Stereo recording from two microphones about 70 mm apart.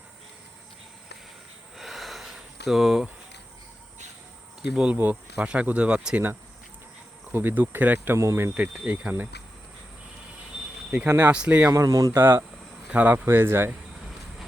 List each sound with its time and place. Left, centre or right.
1.7 s sniff: centre
4.7 s speech: centre
7.3 s speech: right
8.1 s speech: right
8.5 s speech: centre
11.2 s speech: centre
11.7 s speech: right
12.1 s speech: right
12.9 s speech: centre
13.2 s speech: right